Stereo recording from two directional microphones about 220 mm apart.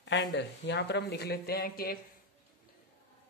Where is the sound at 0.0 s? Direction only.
55° left (ahead or behind).